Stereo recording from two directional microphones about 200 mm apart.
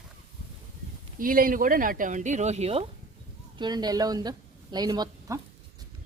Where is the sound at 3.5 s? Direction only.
20° right (ahead or behind).